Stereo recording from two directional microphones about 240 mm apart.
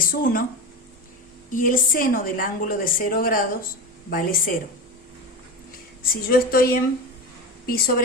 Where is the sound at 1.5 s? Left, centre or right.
Left.